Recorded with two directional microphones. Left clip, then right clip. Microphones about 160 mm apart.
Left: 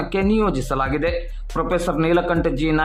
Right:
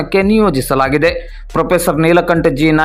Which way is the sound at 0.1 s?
35° right (ahead or behind).